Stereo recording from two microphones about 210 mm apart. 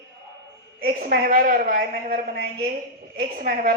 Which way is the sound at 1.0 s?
45° right (ahead or behind).